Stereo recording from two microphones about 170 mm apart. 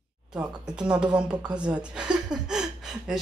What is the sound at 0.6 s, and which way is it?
Speech, 5° right (ahead or behind).